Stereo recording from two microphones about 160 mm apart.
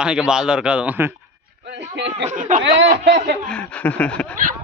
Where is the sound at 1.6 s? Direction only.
90° right.